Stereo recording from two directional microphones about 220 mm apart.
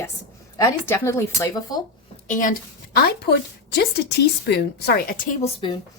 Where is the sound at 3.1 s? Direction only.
45° left (ahead or behind).